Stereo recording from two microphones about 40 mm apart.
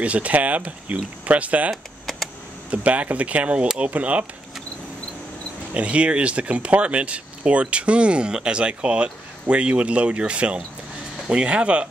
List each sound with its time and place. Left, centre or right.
0.0 s speech: right
2.7 s speech: right
5.8 s speech: right